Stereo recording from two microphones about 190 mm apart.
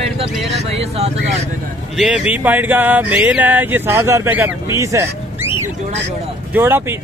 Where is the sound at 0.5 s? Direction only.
35° right (ahead or behind).